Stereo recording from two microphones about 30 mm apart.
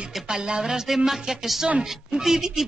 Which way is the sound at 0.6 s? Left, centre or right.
Centre.